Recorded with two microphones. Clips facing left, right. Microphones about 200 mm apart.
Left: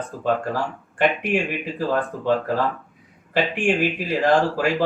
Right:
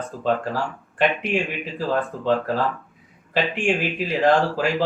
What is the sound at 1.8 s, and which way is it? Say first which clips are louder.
Speech: even; 15° left (ahead or behind).